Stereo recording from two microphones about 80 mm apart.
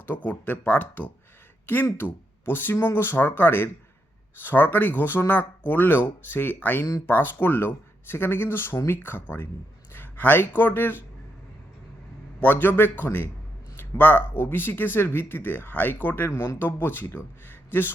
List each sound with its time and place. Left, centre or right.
0.0 s speech: left
12.4 s speech: left
17.5 s a sound: left